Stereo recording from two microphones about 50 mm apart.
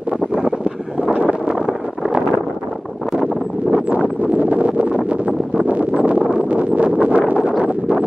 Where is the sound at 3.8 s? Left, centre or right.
Right.